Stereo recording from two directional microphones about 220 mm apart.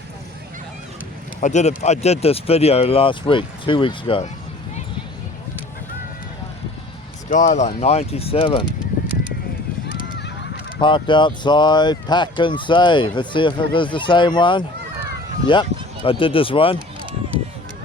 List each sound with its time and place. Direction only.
1.4 s speech: 30° left (ahead or behind)
7.3 s speech: 35° left (ahead or behind)
10.2 s goose: 50° left (ahead or behind)
10.8 s speech: 20° left (ahead or behind)